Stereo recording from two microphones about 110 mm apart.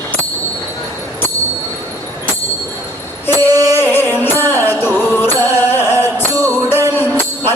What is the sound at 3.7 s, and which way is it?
Music, 20° left (ahead or behind).